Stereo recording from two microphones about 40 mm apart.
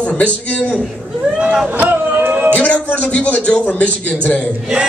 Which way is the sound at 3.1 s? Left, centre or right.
Left.